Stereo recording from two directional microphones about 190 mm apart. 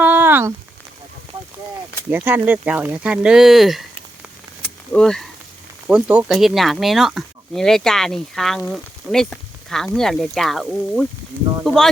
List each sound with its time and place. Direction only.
0.0 s a sound: 10° right (ahead or behind)
2.0 s speech: 10° right (ahead or behind)
4.9 s speech: 5° left (ahead or behind)